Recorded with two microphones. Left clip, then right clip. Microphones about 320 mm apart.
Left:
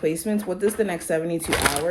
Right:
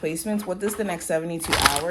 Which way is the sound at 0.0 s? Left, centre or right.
Right.